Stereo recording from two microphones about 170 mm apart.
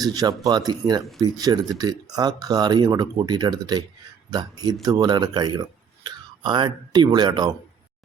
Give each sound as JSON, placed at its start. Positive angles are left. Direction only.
{"t": 0.0, "sound": "speech", "side_deg": -20}